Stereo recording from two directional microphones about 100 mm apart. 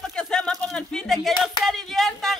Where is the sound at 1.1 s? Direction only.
Centre (ahead or behind).